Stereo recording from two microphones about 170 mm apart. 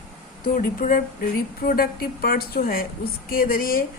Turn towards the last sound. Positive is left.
turn(degrees=60)  # may be behind; listen again after turning